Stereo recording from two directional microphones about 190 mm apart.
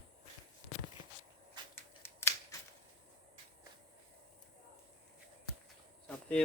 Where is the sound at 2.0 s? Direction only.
15° left (ahead or behind).